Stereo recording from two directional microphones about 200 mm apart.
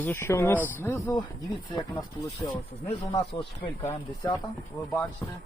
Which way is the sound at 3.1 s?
30° left (ahead or behind).